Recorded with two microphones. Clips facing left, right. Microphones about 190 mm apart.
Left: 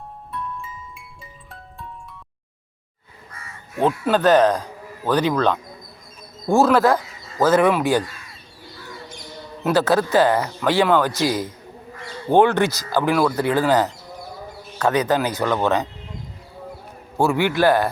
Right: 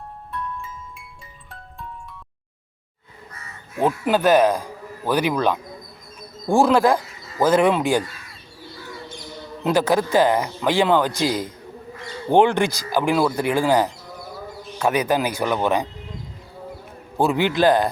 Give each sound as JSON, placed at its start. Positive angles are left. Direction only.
{"t": 0.3, "sound": "music", "side_deg": 0}
{"t": 3.8, "sound": "speech", "side_deg": -10}
{"t": 9.6, "sound": "speech", "side_deg": -15}
{"t": 17.2, "sound": "speech", "side_deg": -15}